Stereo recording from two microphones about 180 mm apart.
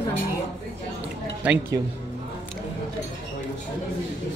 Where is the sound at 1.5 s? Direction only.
5° right (ahead or behind).